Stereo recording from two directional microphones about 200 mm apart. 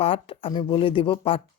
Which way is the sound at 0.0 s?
25° left (ahead or behind).